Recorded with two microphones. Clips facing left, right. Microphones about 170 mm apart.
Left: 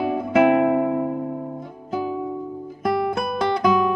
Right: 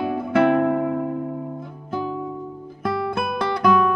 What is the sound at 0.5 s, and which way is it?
Music, 10° left (ahead or behind).